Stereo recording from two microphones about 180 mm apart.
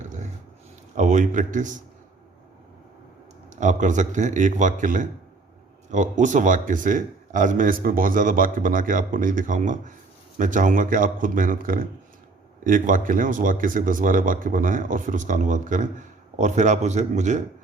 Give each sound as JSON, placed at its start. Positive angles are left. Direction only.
{"t": 0.0, "sound": "a sound", "side_deg": -40}
{"t": 0.9, "sound": "speech", "side_deg": -40}
{"t": 3.6, "sound": "speech", "side_deg": -45}